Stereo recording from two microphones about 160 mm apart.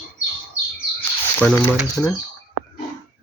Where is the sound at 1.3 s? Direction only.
15° left (ahead or behind).